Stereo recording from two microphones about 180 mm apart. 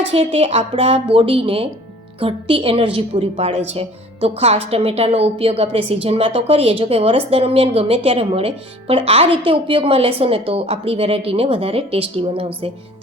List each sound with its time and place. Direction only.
0.1 s a woman's voice: 35° right (ahead or behind)